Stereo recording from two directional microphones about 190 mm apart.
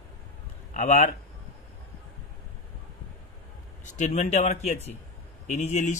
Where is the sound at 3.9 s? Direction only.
40° left (ahead or behind).